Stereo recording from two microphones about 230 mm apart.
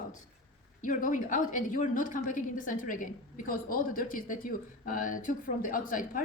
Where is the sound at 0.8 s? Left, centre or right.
Left.